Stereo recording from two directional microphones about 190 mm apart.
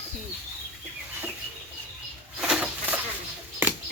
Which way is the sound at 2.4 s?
5° right (ahead or behind).